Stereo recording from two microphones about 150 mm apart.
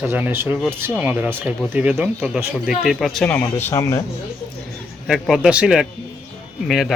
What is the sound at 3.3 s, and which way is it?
Speech, 15° left (ahead or behind).